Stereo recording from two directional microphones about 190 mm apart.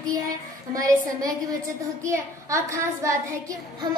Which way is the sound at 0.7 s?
20° right (ahead or behind).